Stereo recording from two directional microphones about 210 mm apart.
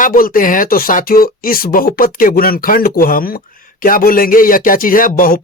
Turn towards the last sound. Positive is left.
turn(degrees=40)  # may be behind; listen again after turning